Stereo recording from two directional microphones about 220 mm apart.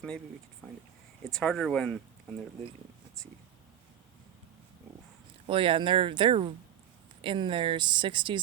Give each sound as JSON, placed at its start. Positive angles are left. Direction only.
{"t": 1.2, "sound": "speech", "side_deg": 0}
{"t": 5.5, "sound": "speech", "side_deg": -25}